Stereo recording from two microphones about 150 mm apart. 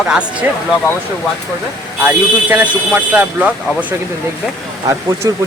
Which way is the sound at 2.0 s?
10° right (ahead or behind).